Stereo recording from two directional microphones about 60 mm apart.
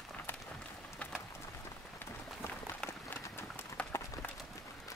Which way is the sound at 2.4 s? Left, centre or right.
Left.